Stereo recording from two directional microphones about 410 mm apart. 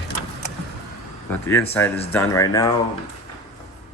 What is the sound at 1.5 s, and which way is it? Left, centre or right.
Speech, centre.